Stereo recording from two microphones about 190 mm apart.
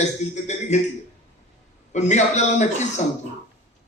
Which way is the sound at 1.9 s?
35° left (ahead or behind).